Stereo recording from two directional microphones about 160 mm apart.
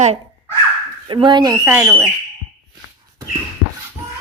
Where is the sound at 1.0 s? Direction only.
30° right (ahead or behind).